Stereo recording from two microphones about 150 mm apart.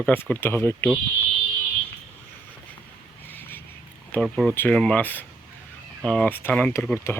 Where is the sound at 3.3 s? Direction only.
15° left (ahead or behind).